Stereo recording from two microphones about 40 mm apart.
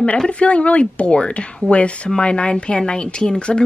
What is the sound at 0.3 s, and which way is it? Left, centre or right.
Speech, left.